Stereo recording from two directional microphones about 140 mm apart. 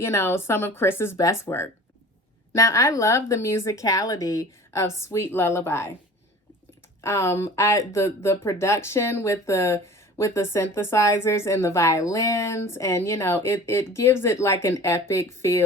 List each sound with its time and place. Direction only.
0.0 s speech: 20° left (ahead or behind)
7.0 s speech: 20° left (ahead or behind)